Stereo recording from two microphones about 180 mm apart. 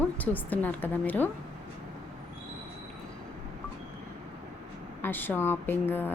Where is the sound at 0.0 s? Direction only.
10° left (ahead or behind).